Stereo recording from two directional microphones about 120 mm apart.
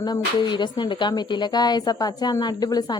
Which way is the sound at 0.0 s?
40° left (ahead or behind).